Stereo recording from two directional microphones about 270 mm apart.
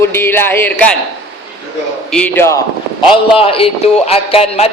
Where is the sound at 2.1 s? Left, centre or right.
Centre.